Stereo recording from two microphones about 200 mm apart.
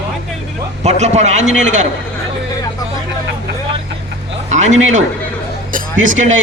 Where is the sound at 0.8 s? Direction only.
35° right (ahead or behind).